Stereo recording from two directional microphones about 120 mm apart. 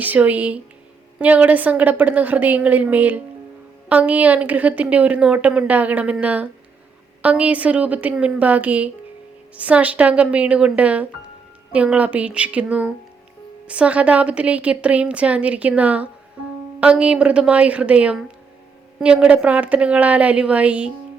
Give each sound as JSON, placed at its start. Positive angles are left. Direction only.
{"t": 0.0, "sound": "a woman's voice", "side_deg": -15}